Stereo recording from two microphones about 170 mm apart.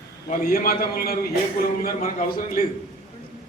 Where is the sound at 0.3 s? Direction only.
50° left (ahead or behind).